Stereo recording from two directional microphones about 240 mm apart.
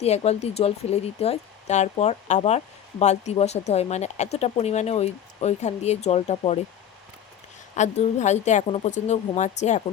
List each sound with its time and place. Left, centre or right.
0.0 s speech: left
7.8 s speech: left